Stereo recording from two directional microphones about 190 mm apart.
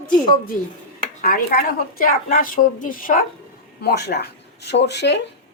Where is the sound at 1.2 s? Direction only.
50° left (ahead or behind).